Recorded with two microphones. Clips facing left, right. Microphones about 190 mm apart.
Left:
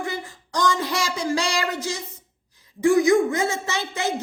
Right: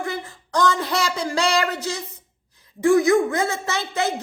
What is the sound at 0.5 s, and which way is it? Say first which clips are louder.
A man's voice: right 2 dB; 15° left (ahead or behind).